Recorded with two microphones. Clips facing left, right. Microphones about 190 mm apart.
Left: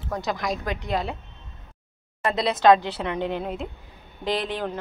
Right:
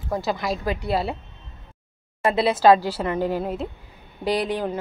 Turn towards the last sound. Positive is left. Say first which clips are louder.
# right 3 dB
turn(degrees=-10)  # may be behind; listen again after turning